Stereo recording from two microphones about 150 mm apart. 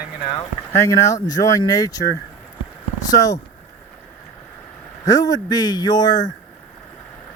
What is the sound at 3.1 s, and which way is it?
Speech, 20° left (ahead or behind).